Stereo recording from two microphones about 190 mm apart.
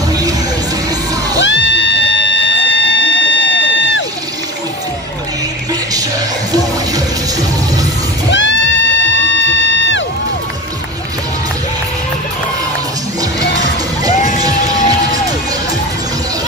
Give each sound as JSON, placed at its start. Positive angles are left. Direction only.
{"t": 0.1, "sound": "music", "side_deg": -20}
{"t": 1.4, "sound": "music", "side_deg": 75}
{"t": 8.3, "sound": "music", "side_deg": 75}
{"t": 9.1, "sound": "music", "side_deg": -90}